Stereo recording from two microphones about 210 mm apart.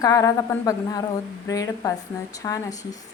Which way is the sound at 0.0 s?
15° left (ahead or behind).